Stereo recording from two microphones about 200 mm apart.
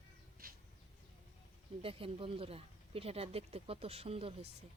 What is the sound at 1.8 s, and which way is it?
Speech, 25° right (ahead or behind).